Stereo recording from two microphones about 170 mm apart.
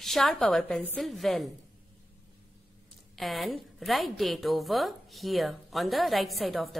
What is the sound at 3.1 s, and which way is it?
A woman's voice, centre (ahead or behind).